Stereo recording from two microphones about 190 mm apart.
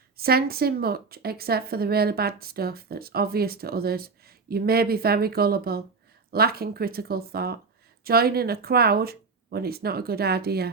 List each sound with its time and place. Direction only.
0.2 s a woman's voice: 55° right (ahead or behind)